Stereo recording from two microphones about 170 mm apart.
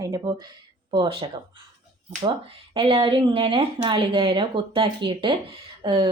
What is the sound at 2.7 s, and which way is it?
Speech, 30° right (ahead or behind).